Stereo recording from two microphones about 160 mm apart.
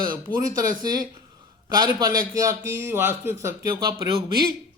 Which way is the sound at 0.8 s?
25° right (ahead or behind).